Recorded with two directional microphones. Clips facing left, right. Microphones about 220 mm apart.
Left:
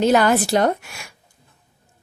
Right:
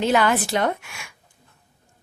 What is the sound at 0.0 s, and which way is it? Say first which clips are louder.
A woman's voice: left 4 dB; 40° left (ahead or behind).